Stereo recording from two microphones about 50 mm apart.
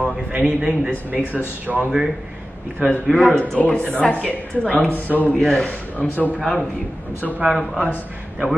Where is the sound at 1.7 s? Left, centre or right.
Centre.